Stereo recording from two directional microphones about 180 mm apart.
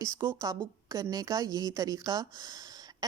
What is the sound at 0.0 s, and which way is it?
A woman's voice, 15° right (ahead or behind).